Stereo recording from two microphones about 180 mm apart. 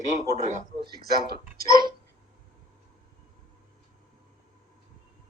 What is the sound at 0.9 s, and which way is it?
Speech, 60° right (ahead or behind).